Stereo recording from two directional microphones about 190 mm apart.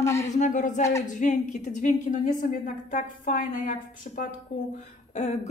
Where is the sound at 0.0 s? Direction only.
15° left (ahead or behind).